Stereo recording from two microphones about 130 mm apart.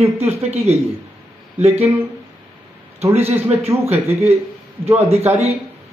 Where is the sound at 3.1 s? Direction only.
50° right (ahead or behind).